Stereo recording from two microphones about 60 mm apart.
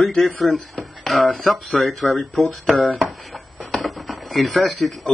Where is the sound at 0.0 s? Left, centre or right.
Centre.